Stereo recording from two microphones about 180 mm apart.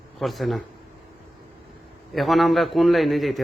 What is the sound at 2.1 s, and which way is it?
A man's voice, centre (ahead or behind).